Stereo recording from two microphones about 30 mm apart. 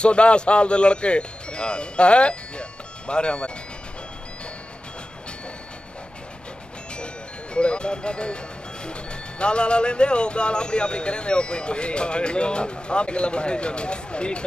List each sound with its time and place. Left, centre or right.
0.0 s speech: left
7.5 s speech: left